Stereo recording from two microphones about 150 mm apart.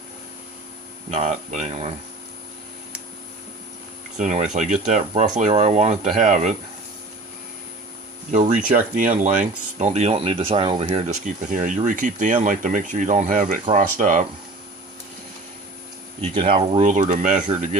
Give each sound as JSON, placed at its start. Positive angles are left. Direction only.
{"t": 1.1, "sound": "speech", "side_deg": -45}
{"t": 4.2, "sound": "speech", "side_deg": -55}
{"t": 8.3, "sound": "speech", "side_deg": -55}
{"t": 9.7, "sound": "speech", "side_deg": -50}
{"t": 11.6, "sound": "speech", "side_deg": -60}
{"t": 16.3, "sound": "speech", "side_deg": -35}
{"t": 16.8, "sound": "speech", "side_deg": -60}